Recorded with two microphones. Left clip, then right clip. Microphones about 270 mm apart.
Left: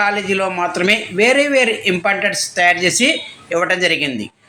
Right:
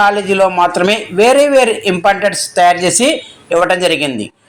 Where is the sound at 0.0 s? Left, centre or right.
Centre.